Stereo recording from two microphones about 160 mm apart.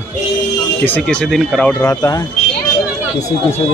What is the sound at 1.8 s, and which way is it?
Speech, 20° left (ahead or behind).